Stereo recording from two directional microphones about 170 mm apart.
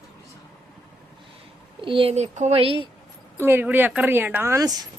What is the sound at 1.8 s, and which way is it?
A woman's voice, 30° right (ahead or behind).